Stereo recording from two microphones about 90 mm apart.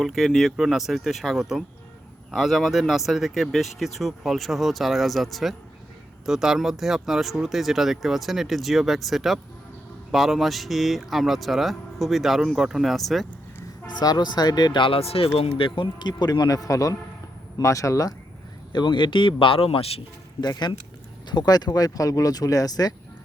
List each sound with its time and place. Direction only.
0.0 s speech: centre (ahead or behind)
13.8 s speech: 50° left (ahead or behind)
18.7 s speech: 55° left (ahead or behind); by 20.0 s 90° left
20.4 s speech: 50° left (ahead or behind)